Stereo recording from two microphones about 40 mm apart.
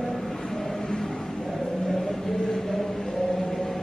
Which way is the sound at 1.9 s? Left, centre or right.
Centre.